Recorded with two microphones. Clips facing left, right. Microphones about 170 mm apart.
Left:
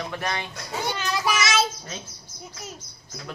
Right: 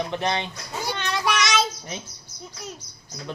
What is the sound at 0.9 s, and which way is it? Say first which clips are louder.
Child singing: right 2 dB; 5° left (ahead or behind).